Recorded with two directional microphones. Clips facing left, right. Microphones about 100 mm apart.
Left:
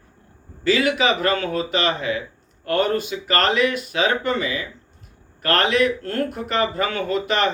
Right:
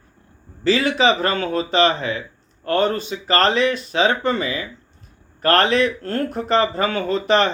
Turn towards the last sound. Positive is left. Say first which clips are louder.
# right 3 dB
turn(degrees=-35)  # may be behind; listen again after turning